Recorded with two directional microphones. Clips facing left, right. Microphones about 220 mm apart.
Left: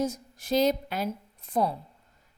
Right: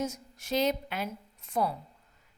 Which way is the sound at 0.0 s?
35° left (ahead or behind).